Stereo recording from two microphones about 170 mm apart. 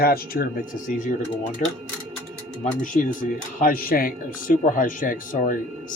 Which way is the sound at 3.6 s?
55° left (ahead or behind).